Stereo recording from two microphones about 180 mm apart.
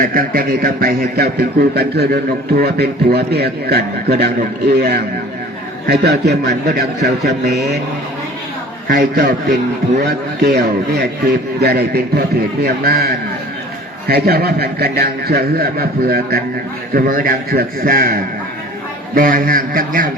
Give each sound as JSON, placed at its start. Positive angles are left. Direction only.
{"t": 0.0, "sound": "a man's voice", "side_deg": -50}
{"t": 8.9, "sound": "a man's voice", "side_deg": -60}